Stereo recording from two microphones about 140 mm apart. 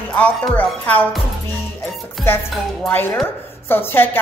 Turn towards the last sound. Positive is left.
turn(degrees=15)  # may be behind; listen again after turning